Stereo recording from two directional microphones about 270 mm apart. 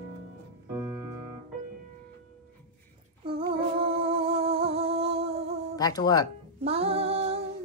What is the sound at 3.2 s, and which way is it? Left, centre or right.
Humming, centre.